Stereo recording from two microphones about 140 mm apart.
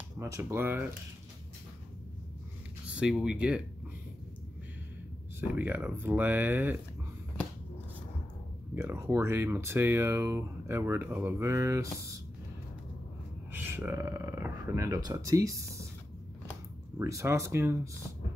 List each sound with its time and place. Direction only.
0.2 s speech: 20° right (ahead or behind)
3.0 s speech: 5° right (ahead or behind)
5.4 s speech: 15° right (ahead or behind)
8.7 s speech: 20° right (ahead or behind)
13.5 s speech: 15° right (ahead or behind)
14.9 s speech: 30° right (ahead or behind)
17.0 s speech: 20° right (ahead or behind)